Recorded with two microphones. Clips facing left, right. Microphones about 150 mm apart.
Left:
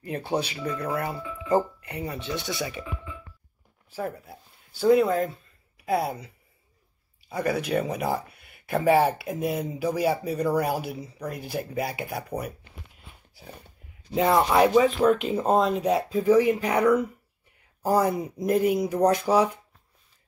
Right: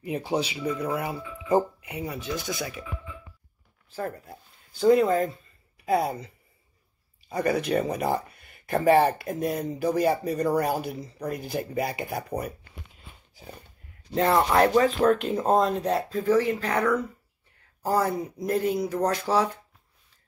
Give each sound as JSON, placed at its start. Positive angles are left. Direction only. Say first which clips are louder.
{"t": 0.0, "sound": "speech", "louder": "right 1 dB", "side_deg": -10}
{"t": 3.9, "sound": "speech", "louder": "left 1 dB", "side_deg": 10}